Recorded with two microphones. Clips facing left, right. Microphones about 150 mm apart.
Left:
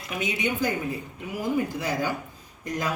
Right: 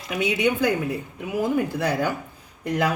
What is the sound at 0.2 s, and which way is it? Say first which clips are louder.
Speech: right 6 dB; 65° right (ahead or behind).